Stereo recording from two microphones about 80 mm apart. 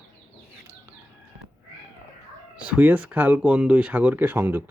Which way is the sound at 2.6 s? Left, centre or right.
Centre.